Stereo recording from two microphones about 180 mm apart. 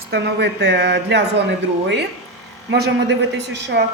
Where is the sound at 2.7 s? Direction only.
70° right (ahead or behind).